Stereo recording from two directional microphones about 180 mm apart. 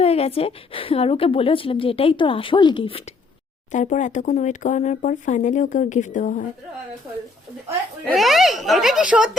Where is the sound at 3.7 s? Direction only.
45° left (ahead or behind).